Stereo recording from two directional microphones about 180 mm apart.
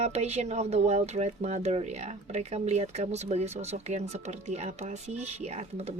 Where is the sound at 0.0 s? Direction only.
35° right (ahead or behind).